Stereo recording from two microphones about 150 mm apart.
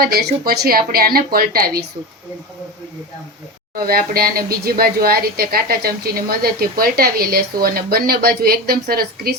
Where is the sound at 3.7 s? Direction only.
85° right.